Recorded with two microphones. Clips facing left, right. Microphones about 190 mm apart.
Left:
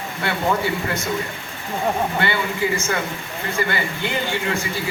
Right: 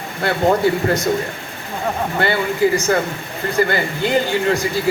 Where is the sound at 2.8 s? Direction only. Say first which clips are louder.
Right 6 dB; 35° right (ahead or behind).